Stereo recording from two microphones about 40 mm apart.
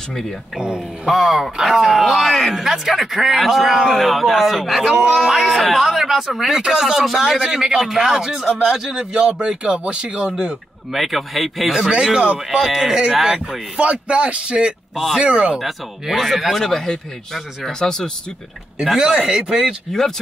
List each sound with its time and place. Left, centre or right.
1.0 s speech: centre
2.5 s a man's voice: centre
10.9 s speech: centre
11.9 s a man's voice: centre
13.7 s a man's voice: right
15.6 s speech: centre
16.6 s speech: centre
18.9 s a man's voice: centre